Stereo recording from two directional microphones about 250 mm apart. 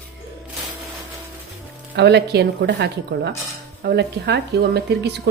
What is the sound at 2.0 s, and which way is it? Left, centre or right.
Speech, right.